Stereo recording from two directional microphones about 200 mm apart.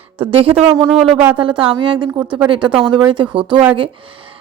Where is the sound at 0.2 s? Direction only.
25° right (ahead or behind).